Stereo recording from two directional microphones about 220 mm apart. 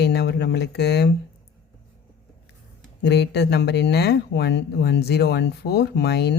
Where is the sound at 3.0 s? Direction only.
50° left (ahead or behind).